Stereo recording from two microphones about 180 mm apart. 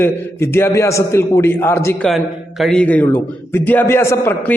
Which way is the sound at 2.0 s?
Centre (ahead or behind).